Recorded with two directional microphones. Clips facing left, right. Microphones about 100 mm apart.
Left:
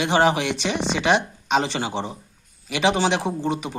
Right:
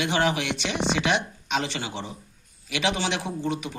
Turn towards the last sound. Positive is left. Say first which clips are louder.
# left 4 dB
turn(degrees=30)  # may be behind; listen again after turning